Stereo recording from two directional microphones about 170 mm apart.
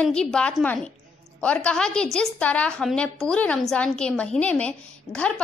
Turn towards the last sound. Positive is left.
turn(degrees=5)  # may be behind; listen again after turning